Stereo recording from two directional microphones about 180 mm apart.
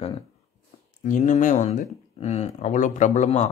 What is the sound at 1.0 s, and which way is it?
Speech, 45° left (ahead or behind).